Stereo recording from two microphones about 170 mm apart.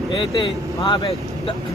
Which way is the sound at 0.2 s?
30° left (ahead or behind).